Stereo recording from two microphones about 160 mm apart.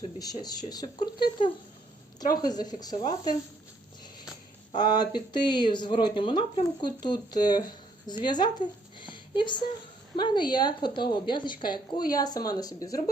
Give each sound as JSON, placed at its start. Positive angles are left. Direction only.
{"t": 0.2, "sound": "a woman's voice", "side_deg": 25}
{"t": 4.8, "sound": "a woman's voice", "side_deg": 25}